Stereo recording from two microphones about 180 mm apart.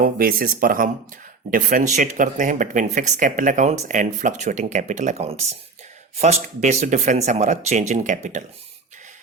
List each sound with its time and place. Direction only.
0.0 s speech: 55° right (ahead or behind)